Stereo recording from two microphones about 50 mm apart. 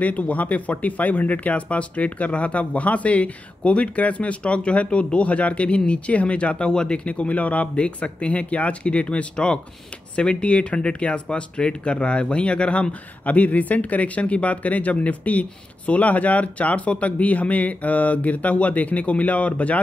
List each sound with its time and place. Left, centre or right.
0.0 s speech: left
13.2 s speech: left